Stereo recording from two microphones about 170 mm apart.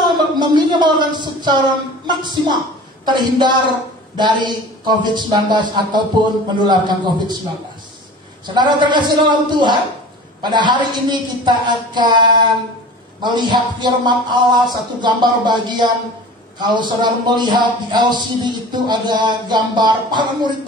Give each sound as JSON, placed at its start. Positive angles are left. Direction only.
{"t": 0.0, "sound": "a sound", "side_deg": -25}
{"t": 2.0, "sound": "speech", "side_deg": -25}
{"t": 8.5, "sound": "speech", "side_deg": -25}